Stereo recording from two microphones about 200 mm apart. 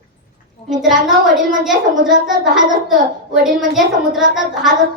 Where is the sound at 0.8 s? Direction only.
Centre (ahead or behind).